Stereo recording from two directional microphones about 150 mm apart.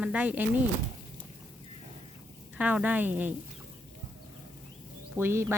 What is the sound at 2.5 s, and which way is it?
Speech, 10° right (ahead or behind).